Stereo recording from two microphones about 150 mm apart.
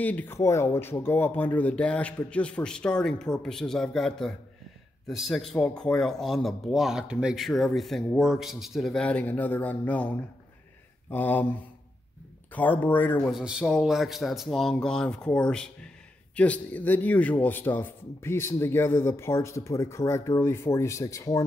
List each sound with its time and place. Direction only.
0.0 s a man's voice: 10° left (ahead or behind)
12.5 s a man's voice: 10° left (ahead or behind)
13.3 s a man's voice: 5° right (ahead or behind); by 21.5 s 25° left (ahead or behind)